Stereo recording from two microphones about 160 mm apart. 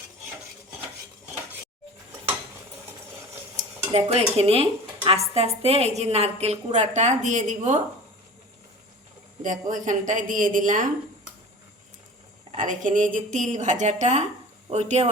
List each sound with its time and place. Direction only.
3.6 s dishes: 40° right (ahead or behind)
5.0 s a woman's voice: 40° right (ahead or behind)
9.4 s a woman's voice: 55° right (ahead or behind)
12.5 s a woman's voice: 50° right (ahead or behind)